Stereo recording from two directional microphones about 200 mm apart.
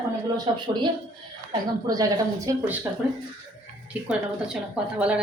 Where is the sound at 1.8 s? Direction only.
20° right (ahead or behind).